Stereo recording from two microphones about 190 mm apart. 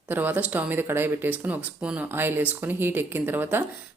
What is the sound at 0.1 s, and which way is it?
Speech, 10° right (ahead or behind).